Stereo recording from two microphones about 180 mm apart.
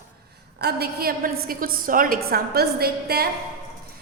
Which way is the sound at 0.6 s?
60° right (ahead or behind).